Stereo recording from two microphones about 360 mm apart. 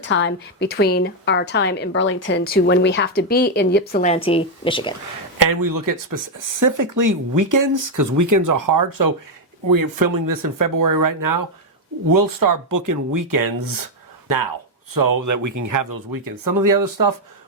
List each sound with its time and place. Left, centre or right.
0.0 s a woman's voice: left; by 4.9 s centre
5.4 s speech: right
14.9 s speech: right